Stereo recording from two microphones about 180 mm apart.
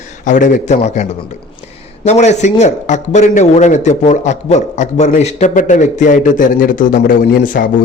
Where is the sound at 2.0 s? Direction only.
40° left (ahead or behind).